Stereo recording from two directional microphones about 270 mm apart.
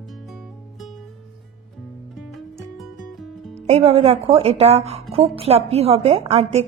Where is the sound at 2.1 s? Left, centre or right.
Centre.